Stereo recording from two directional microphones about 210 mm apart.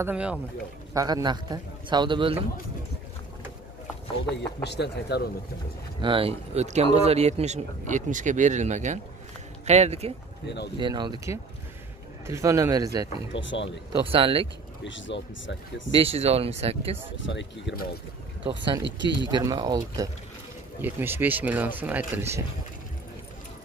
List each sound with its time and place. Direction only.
0.0 s speech: 5° right (ahead or behind)
0.9 s a man's voice: 20° right (ahead or behind)
4.6 s speech: 50° left (ahead or behind)
5.9 s speech: 25° right (ahead or behind)
10.4 s speech: 55° left (ahead or behind)
10.8 s a man's voice: 20° right (ahead or behind)
13.3 s speech: 60° left (ahead or behind)
14.0 s a man's voice: 25° right (ahead or behind)
14.8 s speech: 60° left (ahead or behind)
15.9 s a man's voice: 25° right (ahead or behind)
17.3 s speech: 60° left (ahead or behind)
18.4 s a man's voice: 25° right (ahead or behind)